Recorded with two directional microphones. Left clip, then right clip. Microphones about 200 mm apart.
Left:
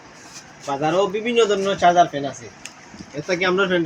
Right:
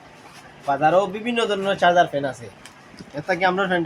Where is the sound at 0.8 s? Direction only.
15° right (ahead or behind).